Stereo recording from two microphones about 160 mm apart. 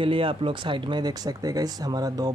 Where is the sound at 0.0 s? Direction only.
35° right (ahead or behind).